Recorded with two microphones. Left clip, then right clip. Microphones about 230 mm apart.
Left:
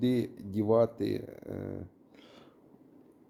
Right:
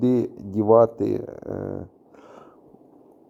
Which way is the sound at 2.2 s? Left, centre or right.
Right.